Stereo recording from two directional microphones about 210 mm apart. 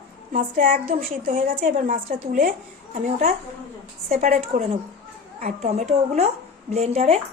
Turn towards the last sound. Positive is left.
turn(degrees=-30)  # may be behind; listen again after turning